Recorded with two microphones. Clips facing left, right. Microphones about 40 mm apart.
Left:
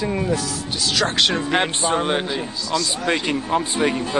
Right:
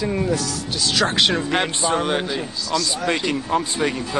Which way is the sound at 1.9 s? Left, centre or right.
Centre.